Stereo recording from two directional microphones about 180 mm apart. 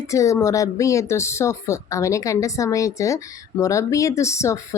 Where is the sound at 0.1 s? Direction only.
15° left (ahead or behind).